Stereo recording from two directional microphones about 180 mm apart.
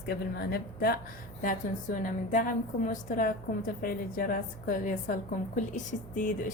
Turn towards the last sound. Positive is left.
turn(degrees=45)  # may be behind; listen again after turning